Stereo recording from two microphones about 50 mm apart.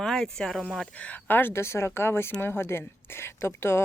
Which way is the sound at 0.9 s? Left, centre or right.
Left.